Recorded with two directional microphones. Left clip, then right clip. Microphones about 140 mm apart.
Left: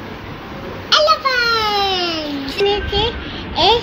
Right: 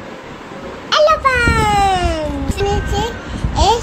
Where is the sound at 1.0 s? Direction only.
55° right (ahead or behind).